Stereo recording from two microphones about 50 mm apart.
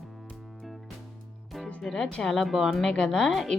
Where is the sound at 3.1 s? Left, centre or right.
Centre.